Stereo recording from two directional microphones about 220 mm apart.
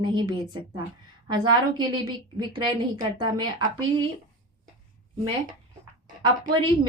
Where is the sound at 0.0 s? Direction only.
20° right (ahead or behind).